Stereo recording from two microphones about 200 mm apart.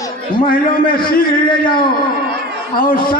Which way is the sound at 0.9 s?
45° left (ahead or behind).